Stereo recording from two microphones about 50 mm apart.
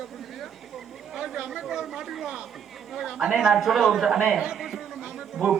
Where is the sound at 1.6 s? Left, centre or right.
Centre.